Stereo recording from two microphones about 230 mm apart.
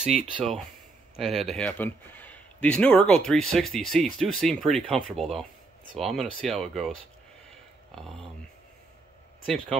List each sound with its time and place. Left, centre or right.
0.0 s speech: right
1.1 s speech: centre
7.9 s speech: centre